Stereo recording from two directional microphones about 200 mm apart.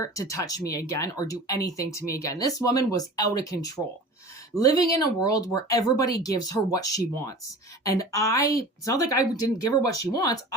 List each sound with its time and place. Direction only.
0.0 s speech: 15° left (ahead or behind)